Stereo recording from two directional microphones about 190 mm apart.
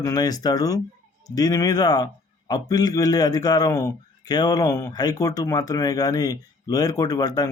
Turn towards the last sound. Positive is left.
turn(degrees=20)  # may be behind; listen again after turning